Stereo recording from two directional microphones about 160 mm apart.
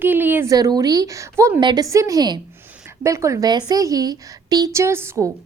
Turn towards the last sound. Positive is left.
turn(degrees=-15)  # may be behind; listen again after turning